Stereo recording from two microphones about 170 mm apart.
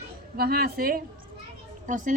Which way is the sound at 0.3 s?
65° right (ahead or behind).